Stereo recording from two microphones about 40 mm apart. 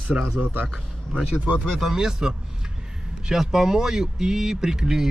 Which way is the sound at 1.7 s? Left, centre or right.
Centre.